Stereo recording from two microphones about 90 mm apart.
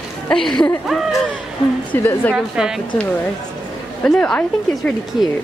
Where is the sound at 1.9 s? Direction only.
20° left (ahead or behind).